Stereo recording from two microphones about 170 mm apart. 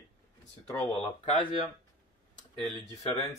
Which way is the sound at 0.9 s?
35° left (ahead or behind).